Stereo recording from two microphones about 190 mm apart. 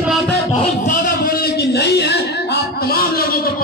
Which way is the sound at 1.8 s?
60° left (ahead or behind).